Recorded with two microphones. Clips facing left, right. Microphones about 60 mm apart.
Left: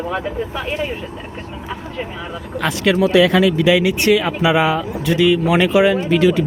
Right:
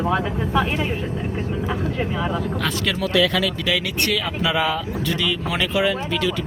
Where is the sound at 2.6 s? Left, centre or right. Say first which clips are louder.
Left 7 dB; left.